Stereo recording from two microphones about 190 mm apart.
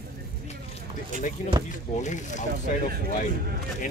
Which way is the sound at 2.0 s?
40° left (ahead or behind).